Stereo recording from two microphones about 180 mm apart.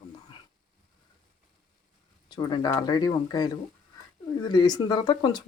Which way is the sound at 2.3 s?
25° left (ahead or behind).